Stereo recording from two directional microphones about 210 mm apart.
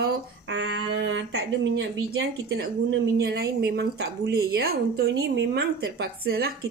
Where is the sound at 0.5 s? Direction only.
55° right (ahead or behind).